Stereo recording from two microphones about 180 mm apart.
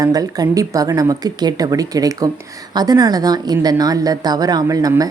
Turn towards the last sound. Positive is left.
turn(degrees=-20)  # may be behind; listen again after turning